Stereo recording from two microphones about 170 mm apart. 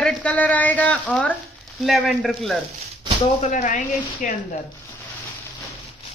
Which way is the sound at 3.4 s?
45° left (ahead or behind).